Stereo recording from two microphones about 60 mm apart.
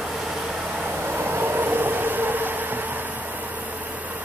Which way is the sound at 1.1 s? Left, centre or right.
Right.